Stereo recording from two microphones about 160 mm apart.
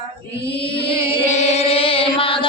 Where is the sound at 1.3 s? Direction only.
45° left (ahead or behind).